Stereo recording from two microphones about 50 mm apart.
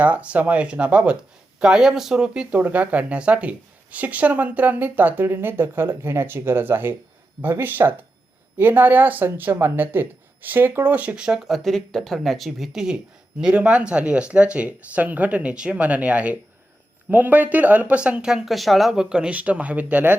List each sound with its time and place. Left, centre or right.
0.0 s speech: right
2.5 s speech: right
10.9 s speech: right
11.4 s speech: centre
13.4 s speech: right
18.3 s speech: centre
18.9 s speech: centre
19.3 s speech: right